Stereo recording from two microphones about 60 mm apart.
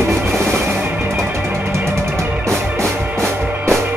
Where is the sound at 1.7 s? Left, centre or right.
Right.